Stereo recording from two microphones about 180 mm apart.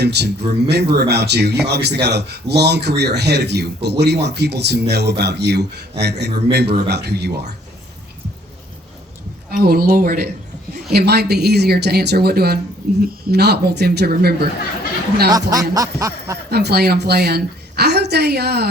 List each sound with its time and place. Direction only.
0.0 s a woman's voice: 70° right (ahead or behind)
9.5 s a woman's voice: 55° right (ahead or behind)
10.9 s a woman's voice: 65° right (ahead or behind)
15.3 s speech: 20° right (ahead or behind)
15.7 s a sound: 20° right (ahead or behind)
16.5 s a woman's voice: 65° right (ahead or behind)